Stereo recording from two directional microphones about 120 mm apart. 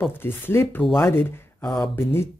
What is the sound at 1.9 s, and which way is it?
Speech, 20° left (ahead or behind).